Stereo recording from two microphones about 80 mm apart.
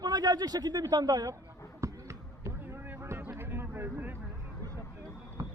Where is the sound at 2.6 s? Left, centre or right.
Right.